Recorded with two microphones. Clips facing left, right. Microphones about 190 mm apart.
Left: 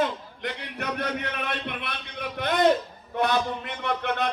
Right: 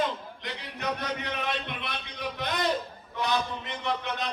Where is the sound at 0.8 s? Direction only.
60° left (ahead or behind).